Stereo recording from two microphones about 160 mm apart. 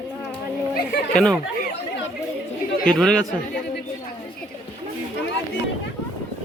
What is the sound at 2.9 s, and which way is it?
Speech, 5° left (ahead or behind).